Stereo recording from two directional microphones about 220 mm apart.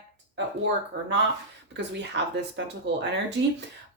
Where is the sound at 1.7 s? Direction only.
55° right (ahead or behind).